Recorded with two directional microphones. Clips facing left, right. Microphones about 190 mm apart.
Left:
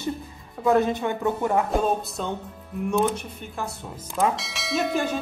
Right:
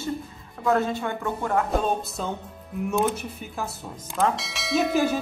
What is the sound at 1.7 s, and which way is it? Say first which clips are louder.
Speech: left 1 dB; centre (ahead or behind).